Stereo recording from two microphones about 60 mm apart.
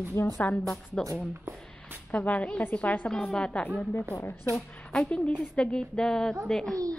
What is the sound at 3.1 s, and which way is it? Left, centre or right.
Speech, centre.